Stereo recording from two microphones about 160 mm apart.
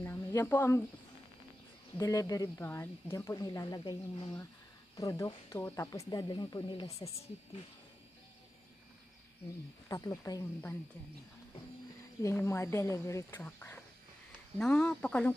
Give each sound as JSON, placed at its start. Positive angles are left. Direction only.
{"t": 0.0, "sound": "a sound", "side_deg": 15}
{"t": 2.0, "sound": "speech", "side_deg": 20}
{"t": 9.8, "sound": "speech", "side_deg": 20}
{"t": 12.2, "sound": "speech", "side_deg": 15}